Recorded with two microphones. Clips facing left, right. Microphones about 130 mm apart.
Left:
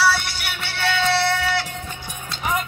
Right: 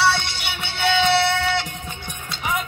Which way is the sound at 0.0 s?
Centre (ahead or behind).